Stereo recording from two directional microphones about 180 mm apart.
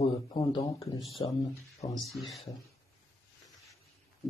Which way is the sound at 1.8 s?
35° left (ahead or behind).